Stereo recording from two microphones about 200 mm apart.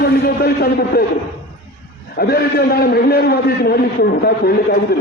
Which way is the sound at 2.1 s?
50° left (ahead or behind).